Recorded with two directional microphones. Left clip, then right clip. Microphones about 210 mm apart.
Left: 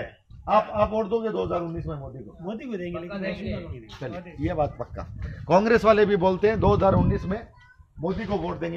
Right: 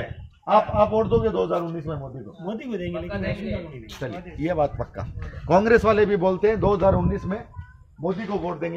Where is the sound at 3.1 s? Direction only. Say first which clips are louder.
Right 2 dB; 25° right (ahead or behind).